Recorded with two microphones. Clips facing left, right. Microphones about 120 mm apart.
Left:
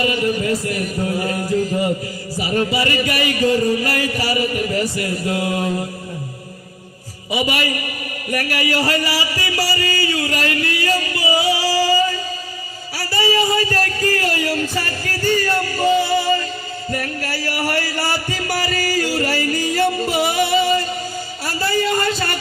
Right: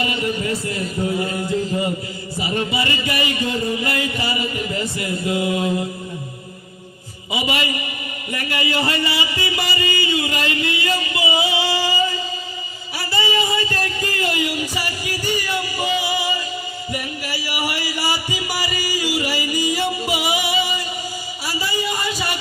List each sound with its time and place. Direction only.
0.0 s speech: 25° right (ahead or behind)
2.4 s speech: 25° right (ahead or behind)
7.3 s speech: 25° right (ahead or behind)
11.3 s music: 20° right (ahead or behind)
13.0 s speech: 20° right (ahead or behind)
16.0 s music: 15° right (ahead or behind)
21.4 s a sound: 10° right (ahead or behind)